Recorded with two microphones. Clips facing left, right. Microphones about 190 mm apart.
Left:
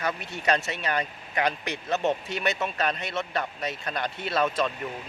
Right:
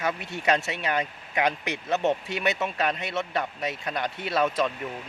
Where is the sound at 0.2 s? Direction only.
20° right (ahead or behind).